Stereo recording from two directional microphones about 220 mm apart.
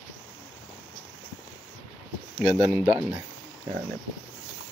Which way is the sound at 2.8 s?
20° right (ahead or behind).